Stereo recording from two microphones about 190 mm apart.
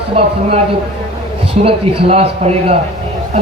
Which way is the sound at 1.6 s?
30° right (ahead or behind).